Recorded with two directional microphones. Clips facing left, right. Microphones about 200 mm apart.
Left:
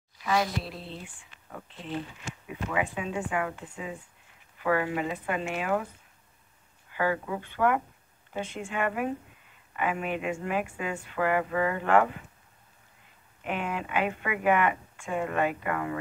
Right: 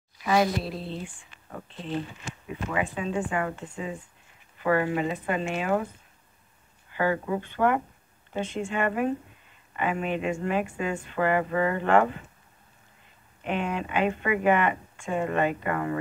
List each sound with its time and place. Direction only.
0.2 s a sound: 15° right (ahead or behind)
0.7 s speech: 35° right (ahead or behind)
1.0 s speech: 5° left (ahead or behind)
6.9 s a sound: 5° left (ahead or behind)
7.2 s speech: centre (ahead or behind)
13.4 s speech: 5° left (ahead or behind)